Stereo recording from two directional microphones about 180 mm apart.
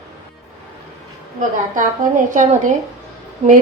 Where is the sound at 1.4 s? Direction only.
45° right (ahead or behind).